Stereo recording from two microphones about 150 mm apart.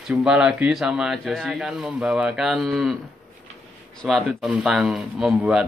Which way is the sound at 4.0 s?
5° left (ahead or behind).